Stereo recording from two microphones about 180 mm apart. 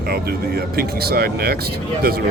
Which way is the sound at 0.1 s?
60° right (ahead or behind).